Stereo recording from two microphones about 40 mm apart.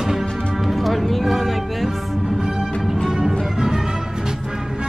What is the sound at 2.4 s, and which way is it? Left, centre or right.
Music, centre.